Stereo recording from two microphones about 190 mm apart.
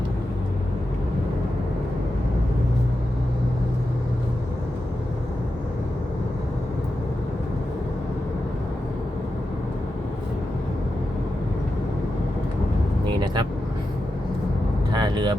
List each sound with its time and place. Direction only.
13.1 s vehicle: 25° right (ahead or behind)
14.9 s vehicle: 20° right (ahead or behind)